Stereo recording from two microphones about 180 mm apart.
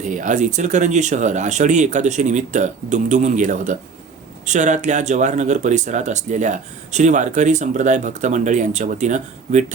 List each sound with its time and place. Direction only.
0.0 s speech: 45° right (ahead or behind)